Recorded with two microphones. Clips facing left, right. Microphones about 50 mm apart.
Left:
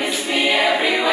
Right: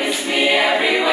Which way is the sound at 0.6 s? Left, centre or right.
Centre.